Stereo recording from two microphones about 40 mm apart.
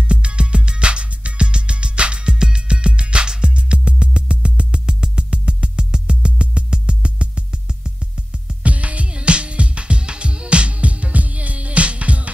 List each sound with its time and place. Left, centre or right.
0.1 s music: right